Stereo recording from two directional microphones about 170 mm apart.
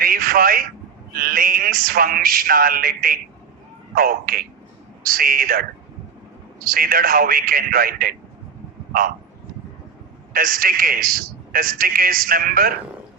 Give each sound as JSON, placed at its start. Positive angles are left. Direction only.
{"t": 0.0, "sound": "a sound", "side_deg": -60}
{"t": 1.1, "sound": "a man's voice", "side_deg": -60}
{"t": 10.3, "sound": "a man's voice", "side_deg": -60}